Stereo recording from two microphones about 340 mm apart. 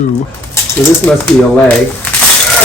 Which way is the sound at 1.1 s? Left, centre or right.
Centre.